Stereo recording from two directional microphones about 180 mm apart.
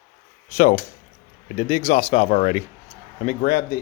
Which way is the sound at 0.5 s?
45° left (ahead or behind).